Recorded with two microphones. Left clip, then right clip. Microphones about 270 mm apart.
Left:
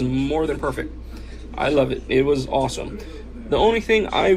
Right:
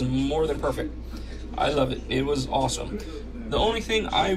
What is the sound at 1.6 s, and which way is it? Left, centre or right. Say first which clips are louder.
A man's voice: left 4 dB; centre.